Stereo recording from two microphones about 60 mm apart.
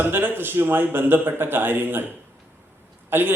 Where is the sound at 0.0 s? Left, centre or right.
Right.